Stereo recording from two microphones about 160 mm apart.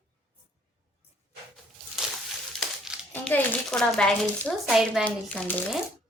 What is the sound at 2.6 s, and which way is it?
Crumpling, centre (ahead or behind).